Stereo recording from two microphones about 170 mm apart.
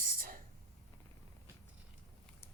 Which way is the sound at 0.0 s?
55° right (ahead or behind).